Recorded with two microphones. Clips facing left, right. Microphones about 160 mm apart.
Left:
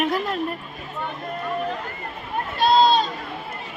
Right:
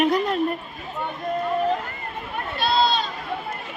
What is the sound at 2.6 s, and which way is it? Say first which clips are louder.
Run: left 5 dB; 45° left (ahead or behind).